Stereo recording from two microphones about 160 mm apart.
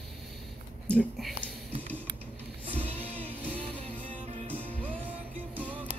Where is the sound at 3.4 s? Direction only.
10° left (ahead or behind).